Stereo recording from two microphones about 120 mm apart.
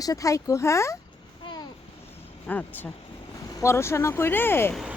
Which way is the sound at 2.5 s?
15° left (ahead or behind).